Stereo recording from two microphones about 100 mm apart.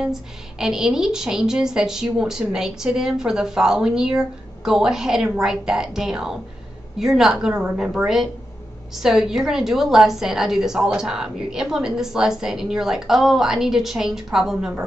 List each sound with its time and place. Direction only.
0.0 s a woman's voice: 5° right (ahead or behind)